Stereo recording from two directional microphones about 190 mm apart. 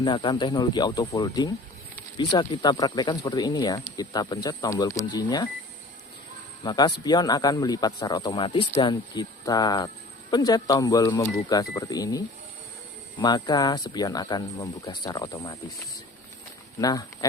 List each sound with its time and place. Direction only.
0.0 s speech: 25° left (ahead or behind)
6.7 s speech: 20° left (ahead or behind)
16.8 s speech: 20° left (ahead or behind)